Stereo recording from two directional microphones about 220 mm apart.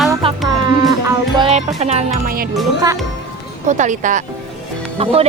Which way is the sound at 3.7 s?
35° right (ahead or behind).